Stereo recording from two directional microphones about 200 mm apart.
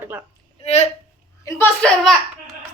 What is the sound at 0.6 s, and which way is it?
Speech, 30° left (ahead or behind).